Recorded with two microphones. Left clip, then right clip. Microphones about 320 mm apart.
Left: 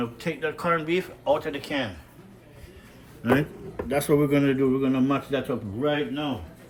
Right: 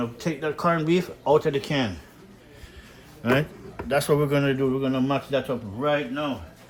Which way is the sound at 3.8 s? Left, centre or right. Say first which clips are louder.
Right 1 dB; right.